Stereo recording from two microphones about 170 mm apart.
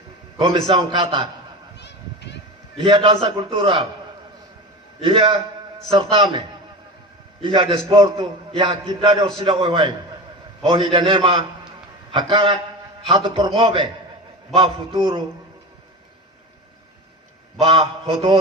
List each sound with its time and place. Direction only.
0.3 s a man's voice: 30° right (ahead or behind)
1.8 s a sound: 90° left
2.7 s a man's voice: 30° right (ahead or behind)
5.0 s a man's voice: 30° right (ahead or behind)
7.4 s a man's voice: 30° right (ahead or behind)
17.6 s a man's voice: 35° right (ahead or behind)